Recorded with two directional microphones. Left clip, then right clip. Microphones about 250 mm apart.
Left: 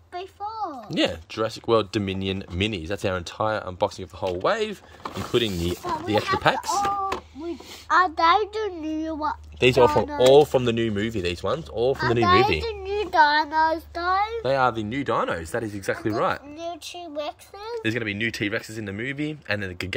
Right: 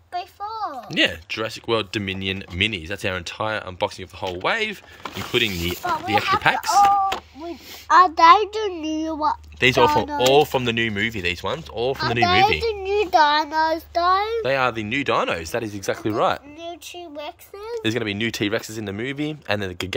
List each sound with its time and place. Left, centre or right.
0.8 s speech: centre
8.0 s a woman's voice: right
10.3 s speech: centre
12.3 s a child's voice: right
14.4 s speech: centre
14.9 s speech: centre